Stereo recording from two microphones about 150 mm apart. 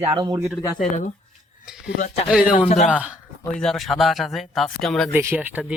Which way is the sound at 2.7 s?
50° left (ahead or behind).